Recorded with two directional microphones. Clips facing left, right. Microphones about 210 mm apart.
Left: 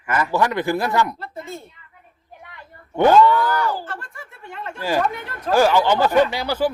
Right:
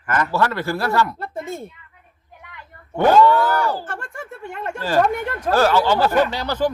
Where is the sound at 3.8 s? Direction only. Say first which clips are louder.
Right 3 dB; 50° right (ahead or behind).